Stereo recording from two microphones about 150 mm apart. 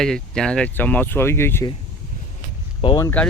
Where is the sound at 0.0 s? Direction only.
5° left (ahead or behind).